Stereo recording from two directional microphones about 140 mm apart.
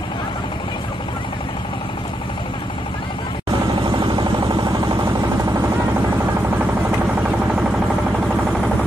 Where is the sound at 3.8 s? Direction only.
35° right (ahead or behind); by 8.7 s 5° right (ahead or behind).